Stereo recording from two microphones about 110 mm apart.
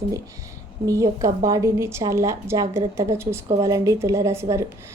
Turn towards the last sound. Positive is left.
turn(degrees=-25)  # may be behind; listen again after turning